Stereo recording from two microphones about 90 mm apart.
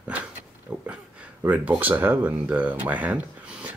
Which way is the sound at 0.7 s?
15° right (ahead or behind).